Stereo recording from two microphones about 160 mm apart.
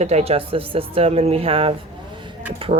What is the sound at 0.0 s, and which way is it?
Speech, 45° right (ahead or behind).